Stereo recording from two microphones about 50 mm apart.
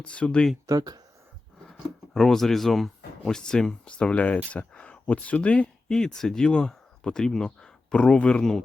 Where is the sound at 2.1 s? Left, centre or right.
Centre; by 6.0 s left.